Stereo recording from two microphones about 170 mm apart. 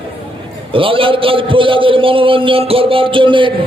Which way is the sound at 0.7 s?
30° right (ahead or behind).